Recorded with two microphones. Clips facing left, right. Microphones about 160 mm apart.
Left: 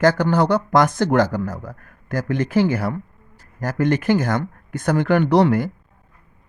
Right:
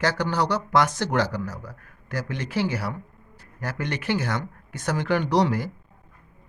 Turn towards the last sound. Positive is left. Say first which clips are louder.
# left 6 dB
turn(degrees=60)  # may be behind; listen again after turning